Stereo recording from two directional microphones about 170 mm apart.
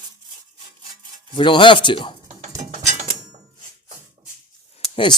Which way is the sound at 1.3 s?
30° left (ahead or behind).